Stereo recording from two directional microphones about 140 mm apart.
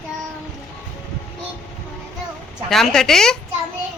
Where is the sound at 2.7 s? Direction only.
Centre (ahead or behind).